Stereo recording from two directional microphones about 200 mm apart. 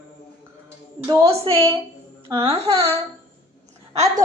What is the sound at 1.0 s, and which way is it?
Speech, 15° right (ahead or behind).